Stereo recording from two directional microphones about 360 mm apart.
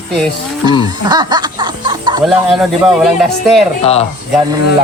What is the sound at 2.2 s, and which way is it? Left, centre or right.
Speech, centre.